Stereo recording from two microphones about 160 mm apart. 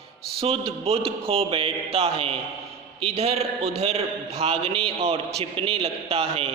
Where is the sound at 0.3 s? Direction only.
35° right (ahead or behind).